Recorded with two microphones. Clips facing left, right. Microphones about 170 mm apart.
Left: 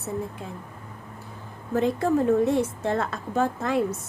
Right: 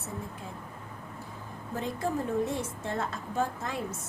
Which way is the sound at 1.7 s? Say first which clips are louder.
Left 9 dB; 70° left (ahead or behind).